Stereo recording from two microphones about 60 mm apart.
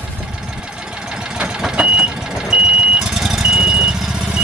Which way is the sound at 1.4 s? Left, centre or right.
Centre.